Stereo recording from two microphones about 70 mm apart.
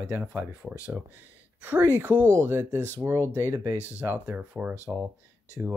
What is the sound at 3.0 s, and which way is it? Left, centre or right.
Speech, right.